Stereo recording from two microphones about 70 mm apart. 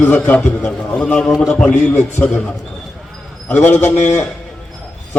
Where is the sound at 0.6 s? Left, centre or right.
Centre.